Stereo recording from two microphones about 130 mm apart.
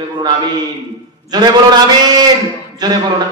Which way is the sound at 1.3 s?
35° right (ahead or behind).